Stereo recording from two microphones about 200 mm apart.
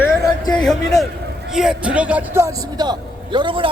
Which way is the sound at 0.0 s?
20° left (ahead or behind).